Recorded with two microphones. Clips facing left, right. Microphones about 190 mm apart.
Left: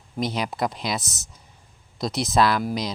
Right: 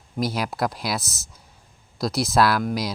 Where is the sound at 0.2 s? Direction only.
5° right (ahead or behind).